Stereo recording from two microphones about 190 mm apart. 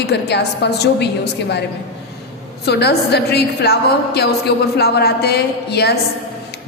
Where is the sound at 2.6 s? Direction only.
60° left (ahead or behind).